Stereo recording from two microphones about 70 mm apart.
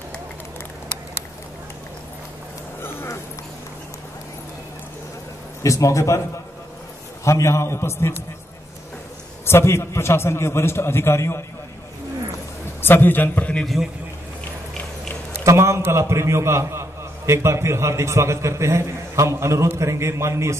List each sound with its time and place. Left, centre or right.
5.6 s speech: left
7.2 s a man's voice: left
9.5 s a man's voice: left
12.8 s a man's voice: left
15.4 s a man's voice: right